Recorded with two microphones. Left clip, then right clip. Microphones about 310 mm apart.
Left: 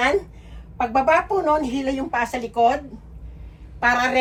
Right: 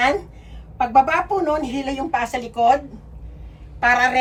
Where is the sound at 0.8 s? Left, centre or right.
Centre.